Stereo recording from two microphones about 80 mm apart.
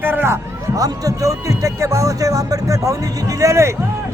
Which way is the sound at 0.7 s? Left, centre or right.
Right.